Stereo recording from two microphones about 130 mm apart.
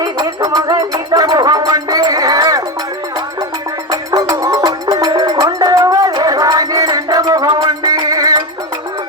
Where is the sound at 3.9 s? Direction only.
25° right (ahead or behind).